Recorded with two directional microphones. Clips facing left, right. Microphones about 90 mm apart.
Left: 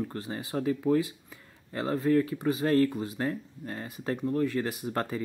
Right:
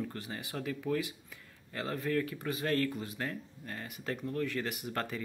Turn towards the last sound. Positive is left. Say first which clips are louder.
# left 5 dB
turn(degrees=25)  # may be behind; listen again after turning